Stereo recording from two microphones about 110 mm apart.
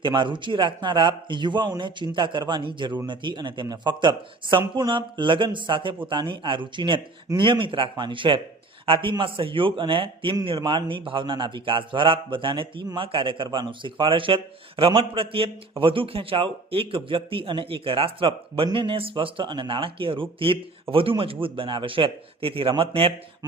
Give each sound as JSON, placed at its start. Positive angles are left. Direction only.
{"t": 0.0, "sound": "a man's voice", "side_deg": -45}